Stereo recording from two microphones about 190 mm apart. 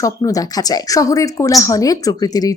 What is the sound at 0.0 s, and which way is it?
Speech, 20° left (ahead or behind).